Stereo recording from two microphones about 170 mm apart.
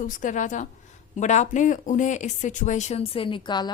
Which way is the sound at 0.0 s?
50° left (ahead or behind).